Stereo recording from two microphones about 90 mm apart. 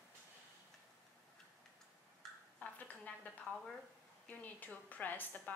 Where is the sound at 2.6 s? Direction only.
15° left (ahead or behind).